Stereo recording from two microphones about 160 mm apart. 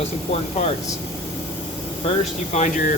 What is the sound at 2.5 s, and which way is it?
Speech, 50° left (ahead or behind).